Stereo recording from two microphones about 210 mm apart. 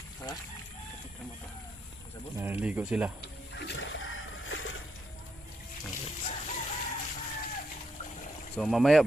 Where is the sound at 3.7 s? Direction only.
60° left (ahead or behind).